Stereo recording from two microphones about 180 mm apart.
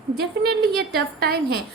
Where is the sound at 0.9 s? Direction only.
60° right (ahead or behind).